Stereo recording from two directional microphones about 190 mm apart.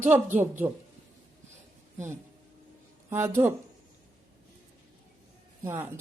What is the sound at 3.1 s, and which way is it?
Speech, 10° right (ahead or behind).